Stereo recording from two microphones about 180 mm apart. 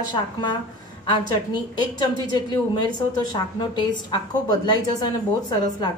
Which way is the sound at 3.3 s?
25° left (ahead or behind).